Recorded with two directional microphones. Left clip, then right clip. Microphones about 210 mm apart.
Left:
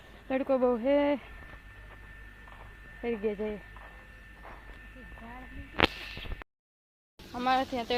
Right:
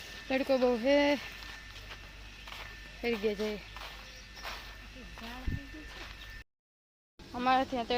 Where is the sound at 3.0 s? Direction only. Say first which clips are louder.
Even; 10° right (ahead or behind).